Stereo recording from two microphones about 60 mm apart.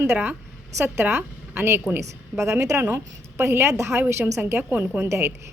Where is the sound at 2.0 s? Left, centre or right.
Right.